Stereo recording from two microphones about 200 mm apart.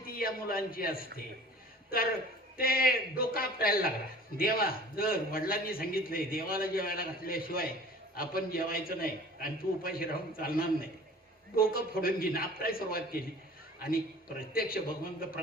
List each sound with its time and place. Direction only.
0.0 s a man's voice: 45° left (ahead or behind)
2.6 s a man's voice: 45° left (ahead or behind)
14.5 s a man's voice: 45° left (ahead or behind)